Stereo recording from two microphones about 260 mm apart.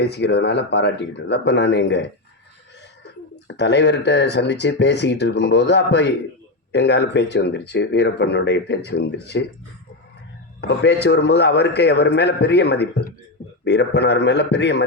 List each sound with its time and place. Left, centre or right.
0.0 s speech: left
3.4 s speech: left
10.6 s speech: left